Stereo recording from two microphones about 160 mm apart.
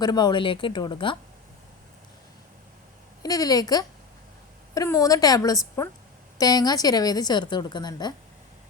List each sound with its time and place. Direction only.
0.0 s speech: 25° left (ahead or behind)
3.2 s a woman's voice: 20° left (ahead or behind)